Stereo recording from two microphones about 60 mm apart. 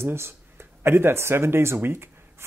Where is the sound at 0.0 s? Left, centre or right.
Right.